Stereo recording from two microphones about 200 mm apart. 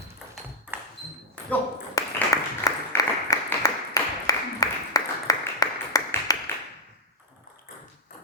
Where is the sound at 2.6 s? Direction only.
15° left (ahead or behind).